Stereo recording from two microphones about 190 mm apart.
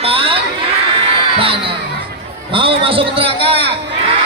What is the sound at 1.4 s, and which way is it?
A man's voice, 30° right (ahead or behind).